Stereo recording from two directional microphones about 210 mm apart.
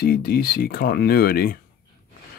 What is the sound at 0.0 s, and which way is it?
Speech, 45° left (ahead or behind).